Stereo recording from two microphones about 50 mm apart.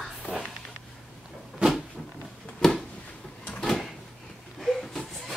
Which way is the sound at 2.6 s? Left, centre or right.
Centre.